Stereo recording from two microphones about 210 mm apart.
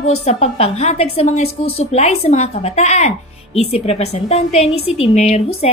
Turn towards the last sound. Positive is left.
turn(degrees=30)  # may be behind; listen again after turning